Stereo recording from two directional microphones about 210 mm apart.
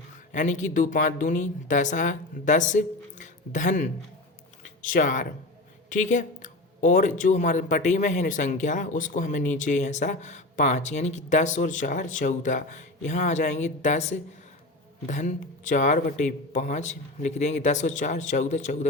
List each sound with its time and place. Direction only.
0.3 s speech: 35° left (ahead or behind)